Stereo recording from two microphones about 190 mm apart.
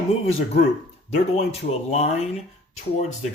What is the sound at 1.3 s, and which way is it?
Speech, 35° left (ahead or behind).